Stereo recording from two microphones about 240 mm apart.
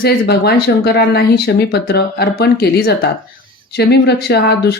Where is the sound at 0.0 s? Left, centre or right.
Left.